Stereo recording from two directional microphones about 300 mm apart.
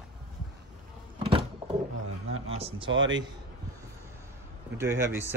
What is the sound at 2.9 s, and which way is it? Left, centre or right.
Speech, right.